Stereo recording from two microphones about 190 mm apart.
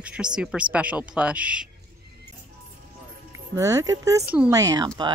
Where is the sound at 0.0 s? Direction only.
5° right (ahead or behind).